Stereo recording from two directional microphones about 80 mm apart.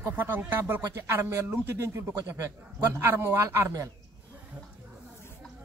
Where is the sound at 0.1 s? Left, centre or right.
Right.